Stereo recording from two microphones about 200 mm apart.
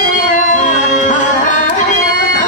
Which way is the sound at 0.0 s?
40° left (ahead or behind).